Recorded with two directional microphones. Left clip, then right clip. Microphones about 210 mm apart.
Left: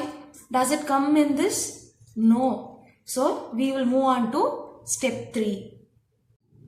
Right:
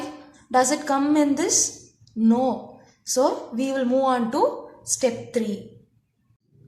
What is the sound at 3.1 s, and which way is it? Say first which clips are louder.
Speech: right 3 dB; 40° right (ahead or behind).